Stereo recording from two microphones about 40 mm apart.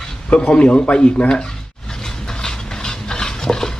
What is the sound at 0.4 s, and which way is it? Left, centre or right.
Speech, left.